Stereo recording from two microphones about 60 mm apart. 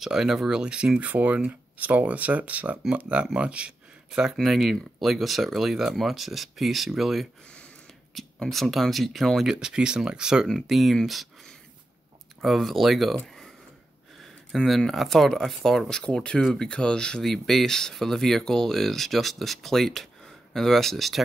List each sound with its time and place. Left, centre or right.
0.0 s speech: centre
4.4 s speech: centre
8.5 s speech: centre
10.5 s speech: centre
12.4 s speech: centre
14.5 s speech: centre